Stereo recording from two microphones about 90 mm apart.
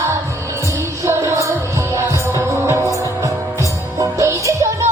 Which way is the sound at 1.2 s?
35° right (ahead or behind).